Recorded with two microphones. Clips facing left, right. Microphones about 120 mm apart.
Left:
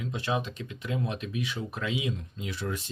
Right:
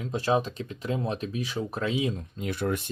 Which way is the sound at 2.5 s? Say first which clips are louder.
Right 6 dB; 55° right (ahead or behind).